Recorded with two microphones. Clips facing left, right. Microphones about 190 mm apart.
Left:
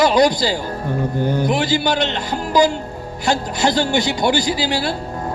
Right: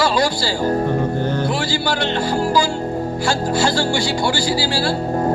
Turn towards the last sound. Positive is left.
turn(degrees=20)  # may be behind; listen again after turning